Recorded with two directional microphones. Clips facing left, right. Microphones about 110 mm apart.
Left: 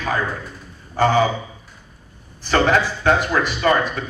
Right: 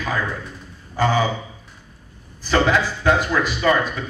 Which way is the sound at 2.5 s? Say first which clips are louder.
Left 1 dB; 50° left (ahead or behind).